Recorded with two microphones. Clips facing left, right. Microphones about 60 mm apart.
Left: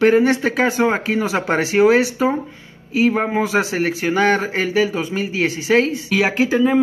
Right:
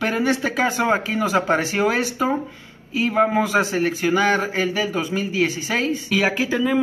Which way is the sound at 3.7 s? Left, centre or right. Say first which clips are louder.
Left 1 dB; left.